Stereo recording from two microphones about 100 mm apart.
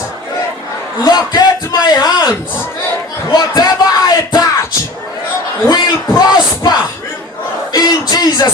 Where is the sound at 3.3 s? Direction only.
40° left (ahead or behind).